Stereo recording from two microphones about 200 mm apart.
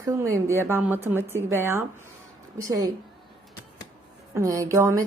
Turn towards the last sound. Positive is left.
turn(degrees=-15)  # may be behind; listen again after turning